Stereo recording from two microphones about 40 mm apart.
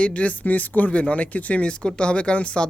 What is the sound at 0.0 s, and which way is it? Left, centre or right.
Speech, left.